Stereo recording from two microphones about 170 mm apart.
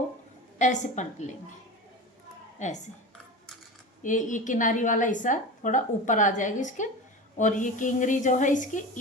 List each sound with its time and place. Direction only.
0.6 s a woman's voice: 45° left (ahead or behind)
2.6 s a woman's voice: 45° left (ahead or behind)
4.0 s a woman's voice: 50° left (ahead or behind)